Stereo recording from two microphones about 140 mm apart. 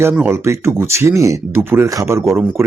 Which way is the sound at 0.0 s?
15° right (ahead or behind).